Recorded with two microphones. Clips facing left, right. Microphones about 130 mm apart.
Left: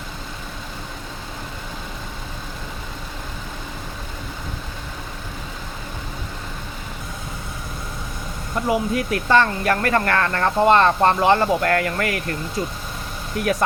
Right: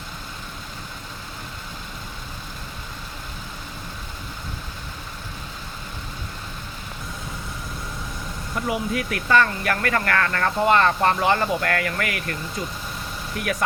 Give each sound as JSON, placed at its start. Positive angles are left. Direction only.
{"t": 8.6, "sound": "speech", "side_deg": 30}